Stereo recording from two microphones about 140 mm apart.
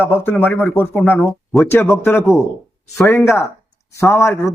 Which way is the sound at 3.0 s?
15° left (ahead or behind).